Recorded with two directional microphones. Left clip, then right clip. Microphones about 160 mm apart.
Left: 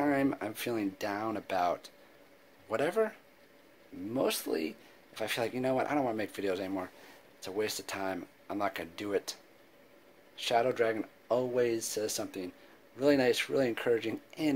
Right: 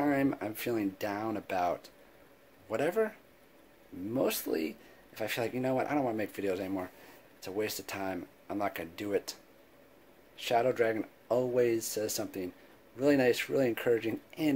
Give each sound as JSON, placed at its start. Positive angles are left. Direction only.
{"t": 0.0, "sound": "speech", "side_deg": 0}
{"t": 4.2, "sound": "speech", "side_deg": -10}
{"t": 10.4, "sound": "speech", "side_deg": -5}